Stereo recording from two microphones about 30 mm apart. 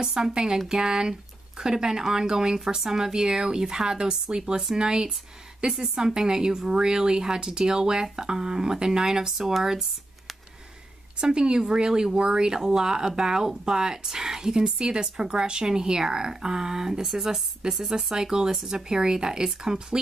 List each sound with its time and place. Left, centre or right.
0.0 s speech: centre
0.3 s a woman's voice: right
9.4 s speech: centre
11.1 s speech: right